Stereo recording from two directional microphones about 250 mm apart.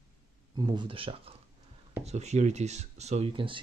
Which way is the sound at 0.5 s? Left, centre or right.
Centre.